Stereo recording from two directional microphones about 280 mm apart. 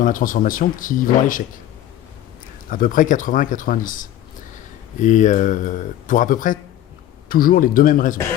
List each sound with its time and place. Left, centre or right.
0.0 s speech: left
2.6 s speech: left